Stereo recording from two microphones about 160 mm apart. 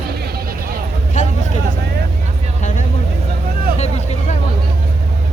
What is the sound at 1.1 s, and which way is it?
Vehicle, 50° left (ahead or behind).